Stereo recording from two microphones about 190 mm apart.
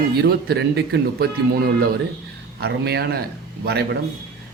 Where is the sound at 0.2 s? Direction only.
60° right (ahead or behind).